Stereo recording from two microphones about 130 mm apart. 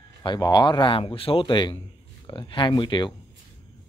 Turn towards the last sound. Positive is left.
turn(degrees=35)  # may be behind; listen again after turning